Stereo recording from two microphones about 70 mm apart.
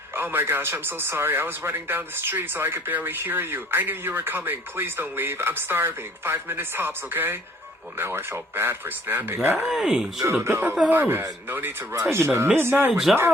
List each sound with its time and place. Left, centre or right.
0.1 s speech: right
9.6 s speech: centre
10.4 s speech: right
12.9 s speech: centre